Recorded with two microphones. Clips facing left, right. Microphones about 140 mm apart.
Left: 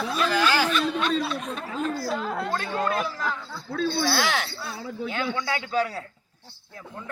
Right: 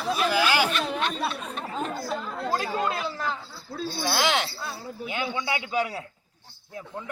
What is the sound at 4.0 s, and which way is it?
A man's voice, 20° right (ahead or behind).